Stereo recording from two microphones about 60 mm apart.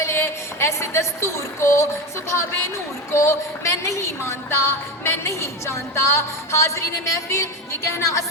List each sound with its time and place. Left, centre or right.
0.0 s music: left
3.1 s a woman's voice: left